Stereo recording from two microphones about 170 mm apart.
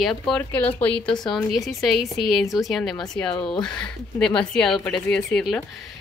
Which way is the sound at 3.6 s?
5° left (ahead or behind).